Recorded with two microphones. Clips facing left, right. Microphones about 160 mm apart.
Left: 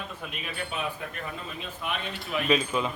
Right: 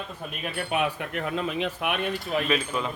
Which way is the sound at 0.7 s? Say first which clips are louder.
Right 9 dB; 80° right.